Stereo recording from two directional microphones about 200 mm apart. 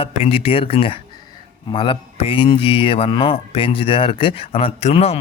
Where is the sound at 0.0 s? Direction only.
30° left (ahead or behind).